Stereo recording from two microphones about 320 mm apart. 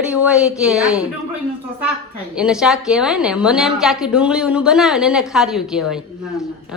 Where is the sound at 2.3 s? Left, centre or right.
Centre.